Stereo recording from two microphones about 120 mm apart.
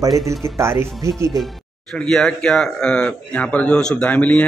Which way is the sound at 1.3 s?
Centre (ahead or behind).